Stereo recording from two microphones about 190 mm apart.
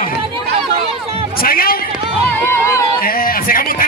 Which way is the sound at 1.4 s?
50° left (ahead or behind).